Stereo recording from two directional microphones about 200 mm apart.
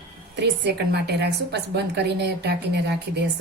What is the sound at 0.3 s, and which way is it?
A woman's voice, 55° right (ahead or behind).